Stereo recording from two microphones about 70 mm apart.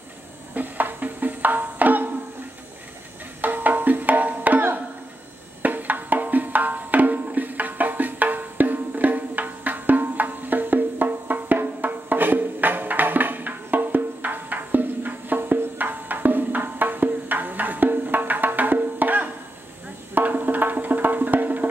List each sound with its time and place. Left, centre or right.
0.6 s music: right
3.3 s music: right